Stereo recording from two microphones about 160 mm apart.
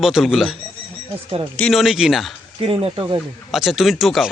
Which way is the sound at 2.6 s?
35° right (ahead or behind).